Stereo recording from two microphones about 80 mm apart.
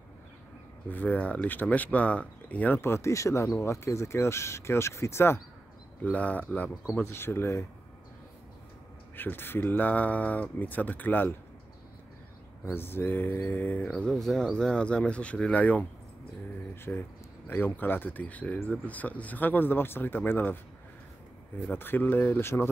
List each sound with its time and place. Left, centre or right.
0.8 s speech: left
2.8 s speech: left
6.1 s speech: centre
7.1 s speech: left
9.1 s speech: left
12.7 s speech: left
14.1 s speech: centre
16.9 s speech: centre
21.6 s speech: left